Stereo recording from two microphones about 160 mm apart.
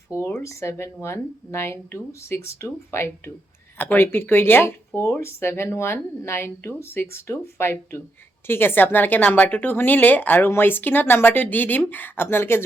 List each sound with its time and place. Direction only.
0.1 s speech: 15° left (ahead or behind)